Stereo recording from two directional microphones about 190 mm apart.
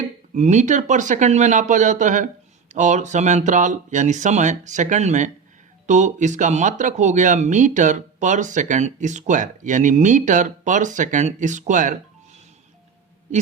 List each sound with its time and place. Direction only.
0.3 s speech: 35° right (ahead or behind)